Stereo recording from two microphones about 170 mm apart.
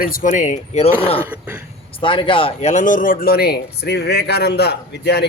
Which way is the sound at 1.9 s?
30° left (ahead or behind).